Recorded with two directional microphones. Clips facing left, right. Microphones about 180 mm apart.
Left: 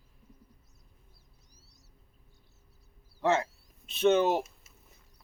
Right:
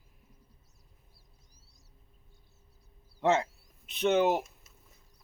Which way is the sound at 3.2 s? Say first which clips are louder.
Right 1 dB; 20° right (ahead or behind).